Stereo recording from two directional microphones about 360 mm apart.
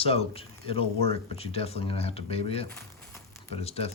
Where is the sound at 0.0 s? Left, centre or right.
Centre.